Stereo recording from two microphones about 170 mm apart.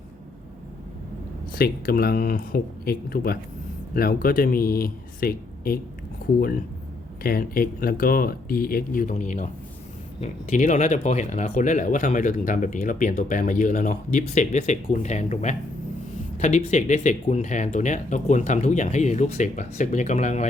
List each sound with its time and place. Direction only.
1.5 s speech: 60° left (ahead or behind)
7.2 s speech: 60° left (ahead or behind); by 20.5 s 40° left (ahead or behind)